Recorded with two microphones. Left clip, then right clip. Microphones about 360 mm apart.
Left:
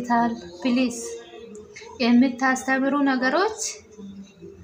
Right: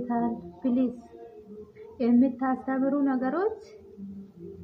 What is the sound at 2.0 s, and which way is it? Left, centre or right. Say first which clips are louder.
A woman's voice: left 5 dB; right.